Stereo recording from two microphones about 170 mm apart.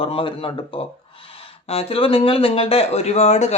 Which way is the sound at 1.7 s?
35° left (ahead or behind).